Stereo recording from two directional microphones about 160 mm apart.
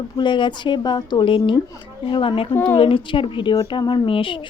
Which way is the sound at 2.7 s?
35° left (ahead or behind).